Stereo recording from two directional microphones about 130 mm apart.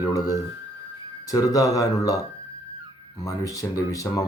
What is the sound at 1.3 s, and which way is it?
Speech, 25° left (ahead or behind).